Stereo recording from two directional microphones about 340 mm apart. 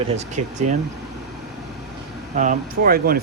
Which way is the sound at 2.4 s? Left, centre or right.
Right.